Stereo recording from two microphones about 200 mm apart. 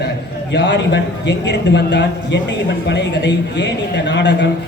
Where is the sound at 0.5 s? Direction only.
60° left (ahead or behind).